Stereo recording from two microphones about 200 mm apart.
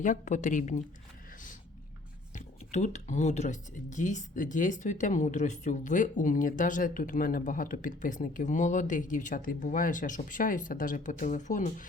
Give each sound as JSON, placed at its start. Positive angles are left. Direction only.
{"t": 0.0, "sound": "speech", "side_deg": 40}
{"t": 2.3, "sound": "speech", "side_deg": 35}